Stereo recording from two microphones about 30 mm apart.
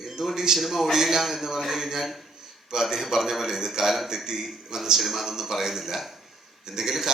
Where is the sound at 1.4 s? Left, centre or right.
Centre.